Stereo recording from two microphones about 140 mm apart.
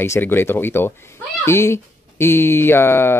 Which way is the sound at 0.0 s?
15° left (ahead or behind).